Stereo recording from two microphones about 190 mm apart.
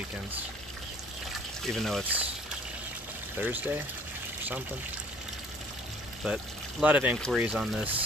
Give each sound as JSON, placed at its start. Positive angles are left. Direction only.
{"t": 1.7, "sound": "speech", "side_deg": 0}
{"t": 3.4, "sound": "speech", "side_deg": -10}
{"t": 6.2, "sound": "speech", "side_deg": -5}